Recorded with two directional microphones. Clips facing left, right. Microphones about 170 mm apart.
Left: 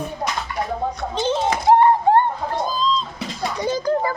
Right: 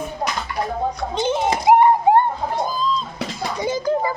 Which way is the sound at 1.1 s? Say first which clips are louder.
Even; 15° right (ahead or behind).